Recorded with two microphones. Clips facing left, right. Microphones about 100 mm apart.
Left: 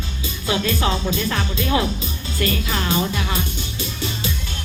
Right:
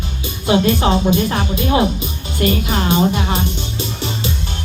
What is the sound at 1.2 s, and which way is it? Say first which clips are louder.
Speech: right 5 dB; 30° right (ahead or behind).